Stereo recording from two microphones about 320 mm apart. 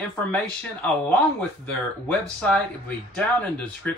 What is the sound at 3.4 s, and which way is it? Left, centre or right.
Speech, centre.